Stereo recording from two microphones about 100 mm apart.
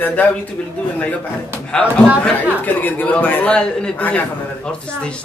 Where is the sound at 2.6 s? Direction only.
15° left (ahead or behind).